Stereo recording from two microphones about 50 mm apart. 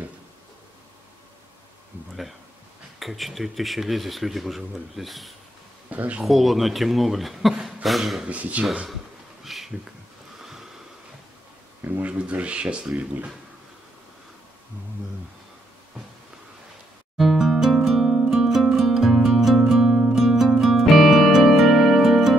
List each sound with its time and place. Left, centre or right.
3.0 s speech: centre
5.9 s speech: right
6.2 s speech: centre
7.5 s a sound: centre
8.3 s speech: right
9.4 s a sound: centre
11.8 s speech: right
12.1 s speech: right
17.2 s music: centre